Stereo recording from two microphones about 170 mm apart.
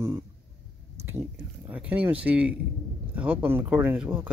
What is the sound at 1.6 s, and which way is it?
Speech, 10° right (ahead or behind).